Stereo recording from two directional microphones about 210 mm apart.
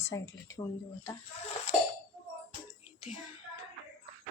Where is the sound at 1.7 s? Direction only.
30° left (ahead or behind).